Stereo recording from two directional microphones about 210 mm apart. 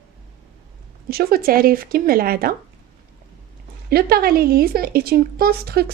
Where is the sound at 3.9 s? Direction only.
45° right (ahead or behind).